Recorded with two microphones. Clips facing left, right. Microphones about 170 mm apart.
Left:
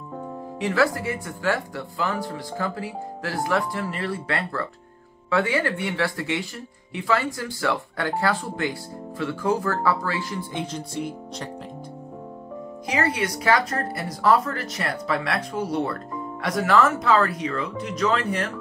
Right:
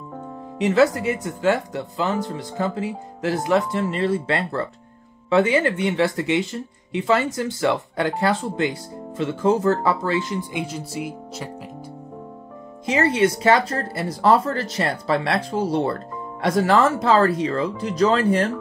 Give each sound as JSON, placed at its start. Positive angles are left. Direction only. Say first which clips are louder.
{"t": 0.6, "sound": "speech", "louder": "right 5 dB", "side_deg": -20}
{"t": 10.6, "sound": "speech", "louder": "right 1 dB", "side_deg": -5}
{"t": 12.8, "sound": "speech", "louder": "right 6 dB", "side_deg": -25}